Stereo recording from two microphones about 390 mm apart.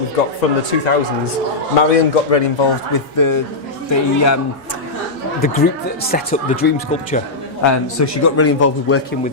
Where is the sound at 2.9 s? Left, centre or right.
Left.